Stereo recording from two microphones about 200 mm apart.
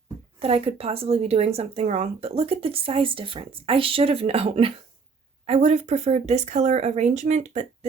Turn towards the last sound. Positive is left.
turn(degrees=-35)  # may be behind; listen again after turning